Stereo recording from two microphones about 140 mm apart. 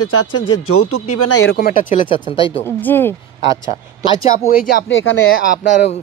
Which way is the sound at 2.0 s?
35° left (ahead or behind).